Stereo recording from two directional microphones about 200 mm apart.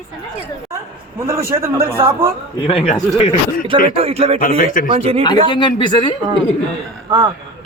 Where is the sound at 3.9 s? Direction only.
30° right (ahead or behind).